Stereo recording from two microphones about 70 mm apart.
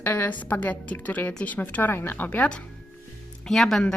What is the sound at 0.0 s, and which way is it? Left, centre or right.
A woman's voice, left.